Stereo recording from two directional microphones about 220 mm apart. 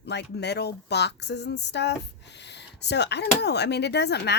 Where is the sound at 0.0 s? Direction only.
50° left (ahead or behind).